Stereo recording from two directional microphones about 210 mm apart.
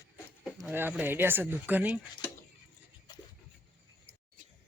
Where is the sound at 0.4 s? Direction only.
5° right (ahead or behind).